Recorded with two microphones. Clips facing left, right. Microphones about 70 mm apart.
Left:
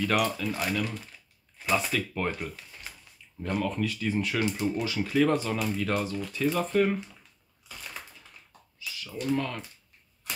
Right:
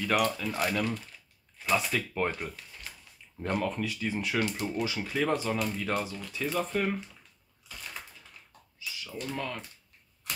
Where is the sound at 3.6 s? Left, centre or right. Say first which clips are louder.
Left 2 dB; centre.